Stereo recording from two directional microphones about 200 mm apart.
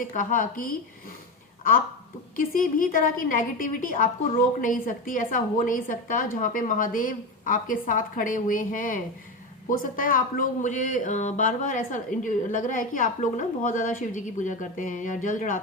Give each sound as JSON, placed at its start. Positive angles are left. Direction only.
{"t": 0.0, "sound": "a woman's voice", "side_deg": 40}
{"t": 2.3, "sound": "a woman's voice", "side_deg": 45}